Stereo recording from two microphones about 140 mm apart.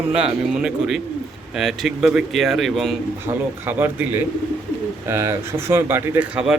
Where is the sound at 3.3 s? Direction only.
15° right (ahead or behind).